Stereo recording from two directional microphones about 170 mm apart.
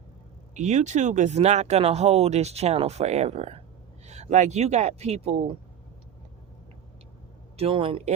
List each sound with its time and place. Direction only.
0.5 s speech: 40° right (ahead or behind)
7.5 s speech: 35° right (ahead or behind)